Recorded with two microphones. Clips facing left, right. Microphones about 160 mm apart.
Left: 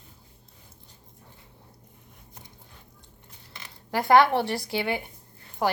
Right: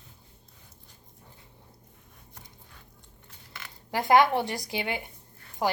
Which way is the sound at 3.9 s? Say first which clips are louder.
Left 2 dB; 20° right (ahead or behind).